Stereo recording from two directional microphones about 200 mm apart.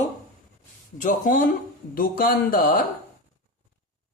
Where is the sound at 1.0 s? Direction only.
40° left (ahead or behind).